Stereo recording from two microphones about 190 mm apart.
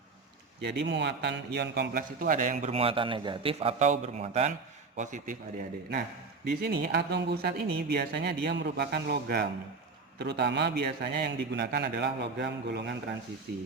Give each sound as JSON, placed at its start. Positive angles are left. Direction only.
{"t": 0.6, "sound": "a man's voice", "side_deg": -60}
{"t": 6.6, "sound": "speech", "side_deg": -55}